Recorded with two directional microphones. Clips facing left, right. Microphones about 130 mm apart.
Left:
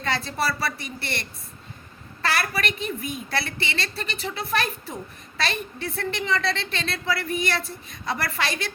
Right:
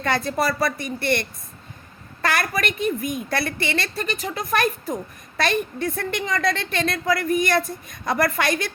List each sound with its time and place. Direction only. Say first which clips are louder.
0.0 s a woman's voice: right 4 dB; 50° right (ahead or behind)
2.2 s a woman's voice: right 3 dB; 45° right (ahead or behind)